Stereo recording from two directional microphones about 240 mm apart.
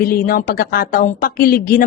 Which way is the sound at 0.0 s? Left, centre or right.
Left.